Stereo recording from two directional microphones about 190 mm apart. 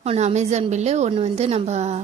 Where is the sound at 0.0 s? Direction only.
30° right (ahead or behind).